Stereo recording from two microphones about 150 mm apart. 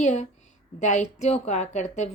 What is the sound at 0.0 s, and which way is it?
A woman's voice, 50° left (ahead or behind).